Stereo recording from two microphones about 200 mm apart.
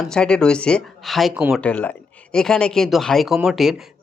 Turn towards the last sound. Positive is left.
turn(degrees=0)  # may be behind; listen again after turning